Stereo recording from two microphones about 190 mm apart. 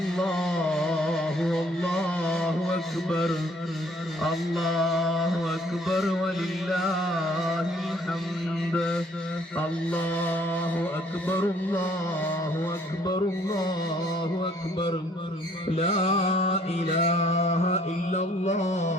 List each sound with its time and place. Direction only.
0.2 s music: 5° left (ahead or behind)
4.2 s mantra: centre (ahead or behind)
8.7 s mantra: 5° left (ahead or behind)
10.2 s mantra: 10° left (ahead or behind)
11.3 s music: 10° left (ahead or behind)
13.1 s music: 20° left (ahead or behind)
14.4 s a sound: 25° left (ahead or behind)
15.7 s mantra: 30° left (ahead or behind)